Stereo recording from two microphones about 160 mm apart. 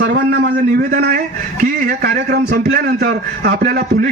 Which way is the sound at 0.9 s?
60° right (ahead or behind).